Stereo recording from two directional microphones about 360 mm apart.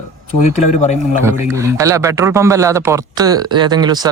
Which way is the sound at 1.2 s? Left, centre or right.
Centre.